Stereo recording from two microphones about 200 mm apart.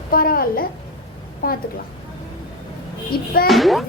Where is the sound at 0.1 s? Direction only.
45° left (ahead or behind).